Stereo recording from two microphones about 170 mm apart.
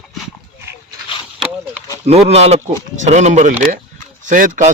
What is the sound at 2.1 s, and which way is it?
Speech, 40° right (ahead or behind).